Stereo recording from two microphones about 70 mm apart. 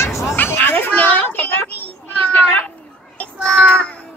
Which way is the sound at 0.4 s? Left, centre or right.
Left.